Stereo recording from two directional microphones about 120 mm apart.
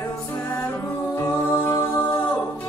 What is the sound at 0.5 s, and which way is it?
Music, 15° left (ahead or behind).